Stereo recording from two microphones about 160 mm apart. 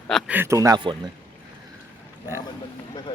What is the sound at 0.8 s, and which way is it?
Speech, 30° right (ahead or behind).